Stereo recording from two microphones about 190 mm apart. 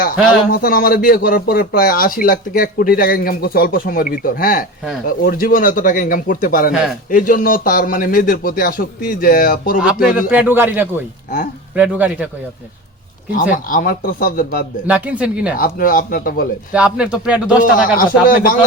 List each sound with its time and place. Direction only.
0.5 s speech: 50° left (ahead or behind)
9.7 s a man's voice: 5° right (ahead or behind)
13.3 s speech: 45° left (ahead or behind)
14.8 s a man's voice: 10° right (ahead or behind)
15.5 s speech: 50° left (ahead or behind)
16.7 s speech: 5° right (ahead or behind)
17.6 s speech: 45° left (ahead or behind)